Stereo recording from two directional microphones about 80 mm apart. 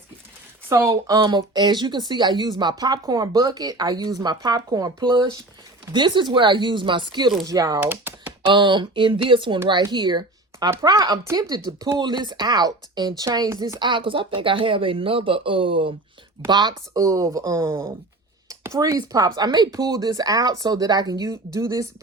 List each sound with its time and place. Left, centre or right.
1.0 s speech: right
5.9 s chopping: right
7.4 s speech: right
7.8 s typing: right
8.4 s speech: right
9.6 s speech: right
10.8 s speech: right
13.7 s speech: right
16.5 s speech: right
18.8 s speech: right